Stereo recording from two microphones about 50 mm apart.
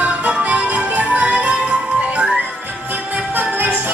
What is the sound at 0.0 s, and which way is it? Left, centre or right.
Music, right.